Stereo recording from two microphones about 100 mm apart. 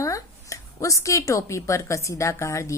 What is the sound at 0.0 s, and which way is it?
Speech, 35° left (ahead or behind).